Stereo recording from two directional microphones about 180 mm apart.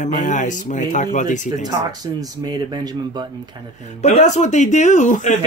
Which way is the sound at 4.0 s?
40° left (ahead or behind).